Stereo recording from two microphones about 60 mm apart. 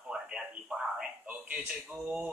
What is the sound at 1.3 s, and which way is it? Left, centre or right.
Speech, right.